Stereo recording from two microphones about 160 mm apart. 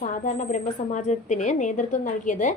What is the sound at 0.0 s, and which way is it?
A woman's voice, 50° left (ahead or behind).